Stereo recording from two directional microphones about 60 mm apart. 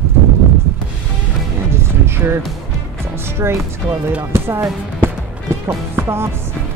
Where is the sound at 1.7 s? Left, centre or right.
Right.